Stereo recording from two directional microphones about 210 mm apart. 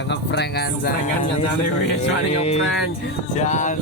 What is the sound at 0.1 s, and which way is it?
Speech, 55° left (ahead or behind).